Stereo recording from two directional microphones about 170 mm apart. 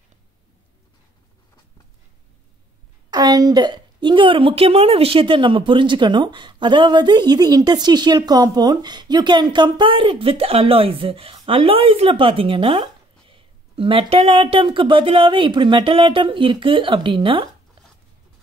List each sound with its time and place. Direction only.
3.1 s a woman's voice: 25° right (ahead or behind)